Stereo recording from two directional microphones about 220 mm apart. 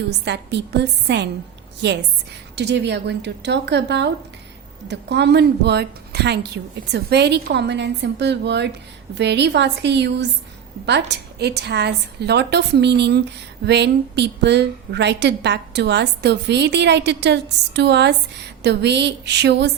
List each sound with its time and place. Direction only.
0.3 s a woman's voice: 50° right (ahead or behind)